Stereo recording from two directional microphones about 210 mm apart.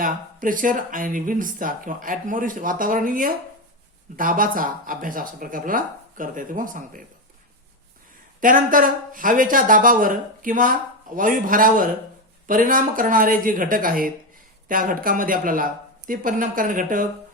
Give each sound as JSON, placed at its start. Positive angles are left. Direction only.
{"t": 0.0, "sound": "speech", "side_deg": -40}
{"t": 8.4, "sound": "speech", "side_deg": -40}